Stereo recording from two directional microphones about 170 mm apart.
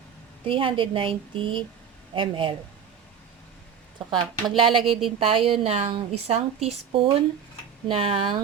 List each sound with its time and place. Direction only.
0.4 s a woman's voice: 30° right (ahead or behind)
4.5 s a woman's voice: 30° right (ahead or behind)
4.8 s speech: centre (ahead or behind)
5.2 s a woman's voice: 30° right (ahead or behind)